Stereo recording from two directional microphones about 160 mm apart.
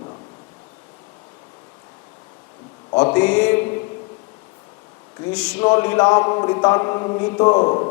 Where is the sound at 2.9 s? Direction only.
25° left (ahead or behind).